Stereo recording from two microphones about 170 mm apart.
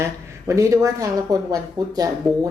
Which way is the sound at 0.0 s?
15° right (ahead or behind).